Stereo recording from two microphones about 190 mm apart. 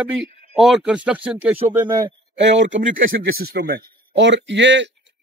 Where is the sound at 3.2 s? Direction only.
60° right (ahead or behind).